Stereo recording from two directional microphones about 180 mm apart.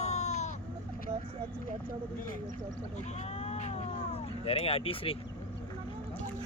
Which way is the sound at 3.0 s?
40° left (ahead or behind).